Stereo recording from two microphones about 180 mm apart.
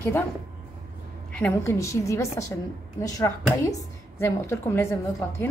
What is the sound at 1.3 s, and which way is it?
A woman's voice, 10° left (ahead or behind).